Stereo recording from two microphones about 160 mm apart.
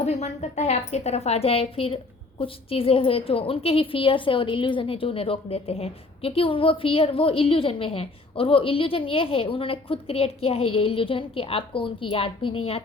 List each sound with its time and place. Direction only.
0.0 s a woman's voice: 45° left (ahead or behind)